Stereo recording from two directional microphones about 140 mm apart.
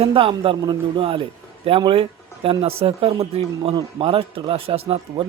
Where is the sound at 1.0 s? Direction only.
40° right (ahead or behind).